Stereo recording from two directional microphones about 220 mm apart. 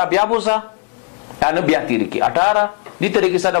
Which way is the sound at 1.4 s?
20° left (ahead or behind).